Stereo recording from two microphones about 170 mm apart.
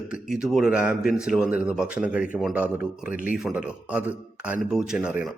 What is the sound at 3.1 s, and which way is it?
Speech, 55° left (ahead or behind).